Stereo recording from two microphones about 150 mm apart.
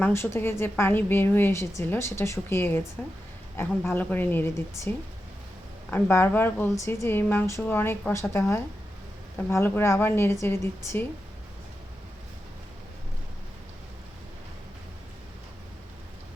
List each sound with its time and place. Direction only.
0.0 s a woman's voice: 15° left (ahead or behind)
9.5 s a woman's voice: 15° left (ahead or behind)